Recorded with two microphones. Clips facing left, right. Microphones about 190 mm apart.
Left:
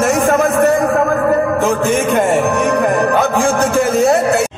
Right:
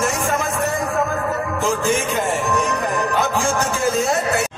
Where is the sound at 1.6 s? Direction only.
60° left (ahead or behind).